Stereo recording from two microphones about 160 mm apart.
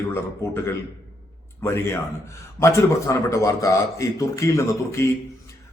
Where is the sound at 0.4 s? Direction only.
15° left (ahead or behind).